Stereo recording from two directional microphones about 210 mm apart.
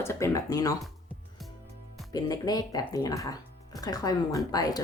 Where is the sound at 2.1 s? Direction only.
20° left (ahead or behind).